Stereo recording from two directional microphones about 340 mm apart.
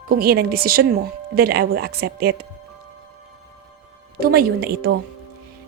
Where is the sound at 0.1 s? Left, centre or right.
Right.